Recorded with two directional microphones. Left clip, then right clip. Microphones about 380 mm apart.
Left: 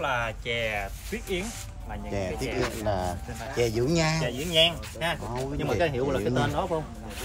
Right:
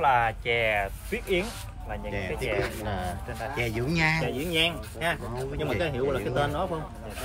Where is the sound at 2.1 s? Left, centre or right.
Centre.